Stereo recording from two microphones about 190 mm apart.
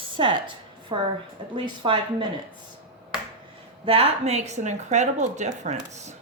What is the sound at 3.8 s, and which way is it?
A woman's voice, 30° right (ahead or behind).